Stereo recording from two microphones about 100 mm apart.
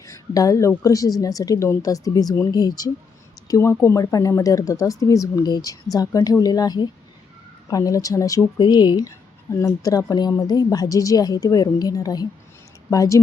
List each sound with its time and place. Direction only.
0.0 s a sound: 35° left (ahead or behind)
0.8 s speech: 35° left (ahead or behind)
3.5 s speech: 30° left (ahead or behind)
8.6 s speech: 50° left (ahead or behind)